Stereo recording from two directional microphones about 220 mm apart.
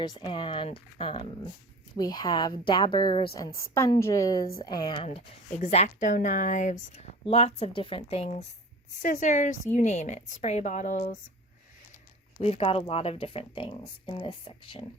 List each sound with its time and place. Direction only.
0.0 s a woman's voice: 20° left (ahead or behind)
5.0 s speech: 30° left (ahead or behind)
12.4 s speech: 25° left (ahead or behind)